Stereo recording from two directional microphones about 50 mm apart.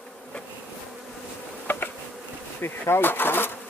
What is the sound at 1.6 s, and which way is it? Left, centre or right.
Bee, left.